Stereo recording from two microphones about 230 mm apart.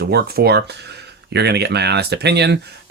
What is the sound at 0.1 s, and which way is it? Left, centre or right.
Speech, right.